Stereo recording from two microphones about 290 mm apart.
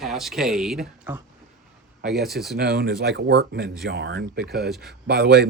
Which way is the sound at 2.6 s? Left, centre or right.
Right.